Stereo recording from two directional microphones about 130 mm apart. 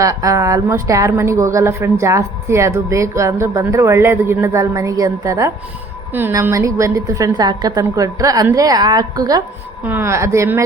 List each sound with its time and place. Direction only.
0.0 s a woman's voice: 25° right (ahead or behind)
9.8 s a woman's voice: 15° right (ahead or behind)